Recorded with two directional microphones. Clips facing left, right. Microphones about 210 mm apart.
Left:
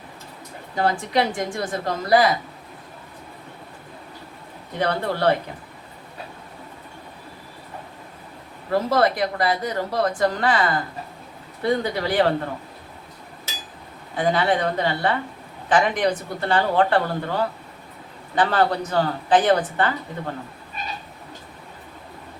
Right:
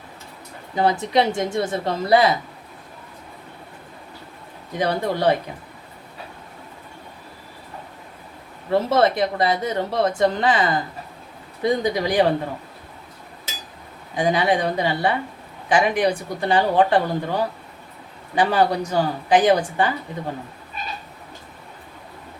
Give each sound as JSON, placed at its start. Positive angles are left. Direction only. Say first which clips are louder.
{"t": 0.8, "sound": "a woman's voice", "louder": "right 2 dB", "side_deg": -20}
{"t": 4.8, "sound": "speech", "louder": "right 1 dB", "side_deg": -15}
{"t": 8.9, "sound": "a woman's voice", "louder": "right 1 dB", "side_deg": -25}
{"t": 14.2, "sound": "speech", "louder": "right 1 dB", "side_deg": -15}